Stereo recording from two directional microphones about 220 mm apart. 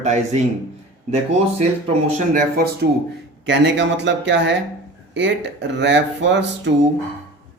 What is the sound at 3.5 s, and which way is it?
Speech, 55° right (ahead or behind).